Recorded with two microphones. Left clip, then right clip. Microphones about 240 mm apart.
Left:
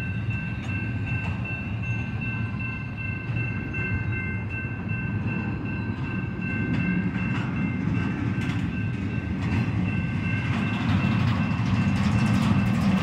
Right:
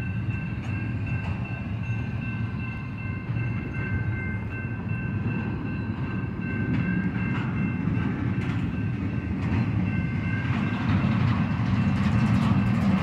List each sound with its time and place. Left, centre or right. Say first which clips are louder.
8.0 s train: left 1 dB; left
10.3 s vehicle: left 1 dB; left